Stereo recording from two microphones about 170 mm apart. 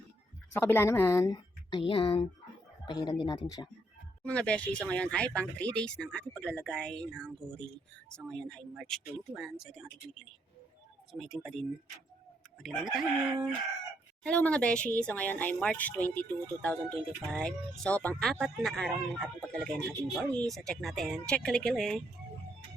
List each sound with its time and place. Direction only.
0.5 s speech: 15° left (ahead or behind)
1.8 s speech: 30° left (ahead or behind)
4.2 s speech: 5° left (ahead or behind)
11.1 s speech: centre (ahead or behind)
12.6 s speech: centre (ahead or behind)
14.3 s speech: 5° left (ahead or behind)